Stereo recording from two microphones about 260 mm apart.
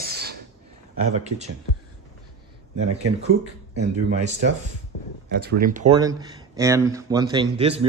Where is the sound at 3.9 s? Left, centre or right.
Right.